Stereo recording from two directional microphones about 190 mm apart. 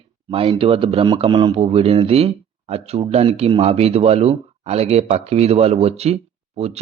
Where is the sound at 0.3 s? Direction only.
30° right (ahead or behind).